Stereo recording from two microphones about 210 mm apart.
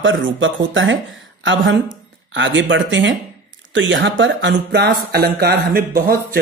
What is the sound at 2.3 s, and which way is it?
Speech, 60° right (ahead or behind).